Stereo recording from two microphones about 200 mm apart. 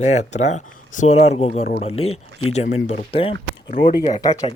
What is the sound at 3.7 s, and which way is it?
Speech, 40° left (ahead or behind).